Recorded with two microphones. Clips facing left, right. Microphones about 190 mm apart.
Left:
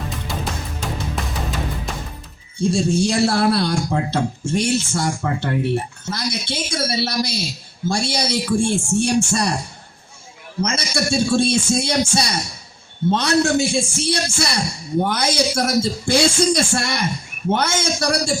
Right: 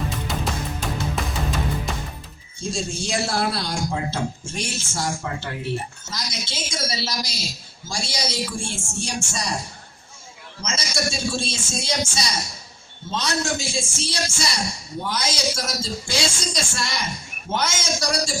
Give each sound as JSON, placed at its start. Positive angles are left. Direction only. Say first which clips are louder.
{"t": 1.1, "sound": "music", "louder": "even", "side_deg": 0}
{"t": 2.6, "sound": "speech", "louder": "left 10 dB", "side_deg": 65}
{"t": 10.6, "sound": "speech", "louder": "left 5 dB", "side_deg": 60}